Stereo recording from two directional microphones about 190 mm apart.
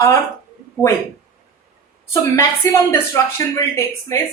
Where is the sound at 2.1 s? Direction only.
15° left (ahead or behind).